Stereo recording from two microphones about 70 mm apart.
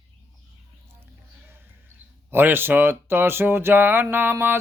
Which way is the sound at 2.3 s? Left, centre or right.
Right.